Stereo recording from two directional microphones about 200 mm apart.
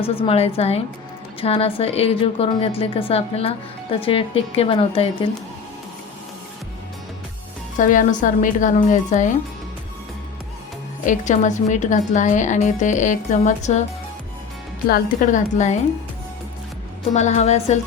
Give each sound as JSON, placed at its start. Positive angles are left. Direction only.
{"t": 0.0, "sound": "a woman's voice", "side_deg": 30}
{"t": 7.8, "sound": "speech", "side_deg": 40}
{"t": 11.0, "sound": "speech", "side_deg": 40}
{"t": 14.8, "sound": "speech", "side_deg": 45}
{"t": 17.2, "sound": "speech", "side_deg": 35}